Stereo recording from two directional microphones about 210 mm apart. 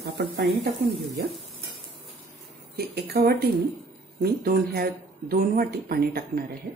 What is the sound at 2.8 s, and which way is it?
Speech, 45° right (ahead or behind).